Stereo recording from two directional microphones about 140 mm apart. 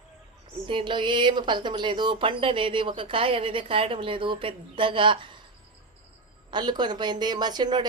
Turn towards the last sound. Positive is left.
turn(degrees=-30)  # may be behind; listen again after turning